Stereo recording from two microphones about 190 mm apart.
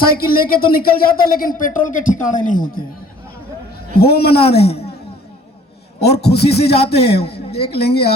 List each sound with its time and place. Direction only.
0.0 s a man's voice: 50° left (ahead or behind)
3.9 s a woman's voice: 55° left (ahead or behind)
4.7 s a sound: 30° left (ahead or behind)
6.0 s a woman's voice: 60° left (ahead or behind)
6.7 s a man's voice: 30° left (ahead or behind)
7.0 s a woman's voice: 60° left (ahead or behind)